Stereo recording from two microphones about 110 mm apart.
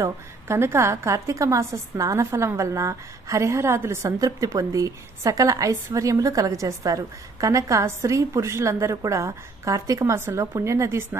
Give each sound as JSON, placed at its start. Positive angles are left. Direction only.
{"t": 0.0, "sound": "a woman's voice", "side_deg": -25}